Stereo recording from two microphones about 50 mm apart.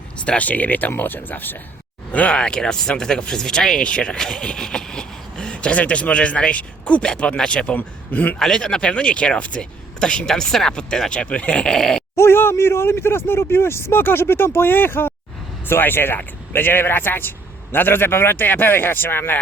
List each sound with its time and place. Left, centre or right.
0.3 s speech: left
2.1 s speech: left
3.8 s a sound: centre
5.7 s speech: left
7.8 s speech: left
8.4 s speech: centre
12.1 s a man's voice: left